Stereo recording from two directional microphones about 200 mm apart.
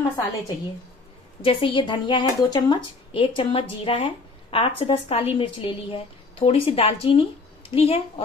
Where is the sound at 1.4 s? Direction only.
25° left (ahead or behind).